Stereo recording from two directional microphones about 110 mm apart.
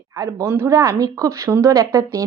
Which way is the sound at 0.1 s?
30° right (ahead or behind).